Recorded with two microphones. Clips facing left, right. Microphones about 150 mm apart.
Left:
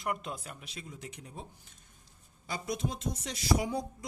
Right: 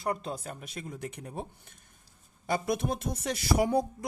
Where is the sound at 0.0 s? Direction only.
35° right (ahead or behind).